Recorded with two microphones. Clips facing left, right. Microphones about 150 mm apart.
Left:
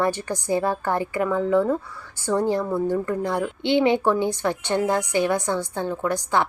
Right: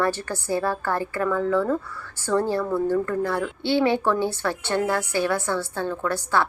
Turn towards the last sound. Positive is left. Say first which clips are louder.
# left 1 dB
turn(degrees=15)  # may be behind; listen again after turning